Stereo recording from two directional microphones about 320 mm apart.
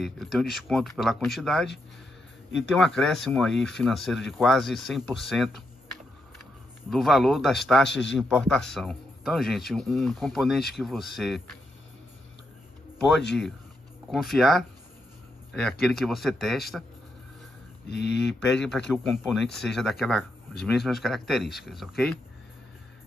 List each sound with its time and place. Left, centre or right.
0.0 s speech: centre
2.7 s speech: centre
6.9 s speech: centre
7.9 s speech: left
8.2 s speech: centre
14.1 s speech: centre
17.8 s speech: left
18.5 s speech: centre